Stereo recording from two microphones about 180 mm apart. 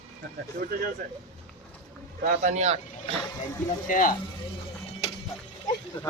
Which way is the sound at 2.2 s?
45° right (ahead or behind).